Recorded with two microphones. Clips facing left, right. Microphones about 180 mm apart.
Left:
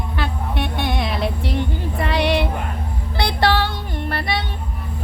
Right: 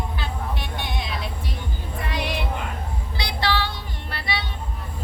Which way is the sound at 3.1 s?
55° left (ahead or behind).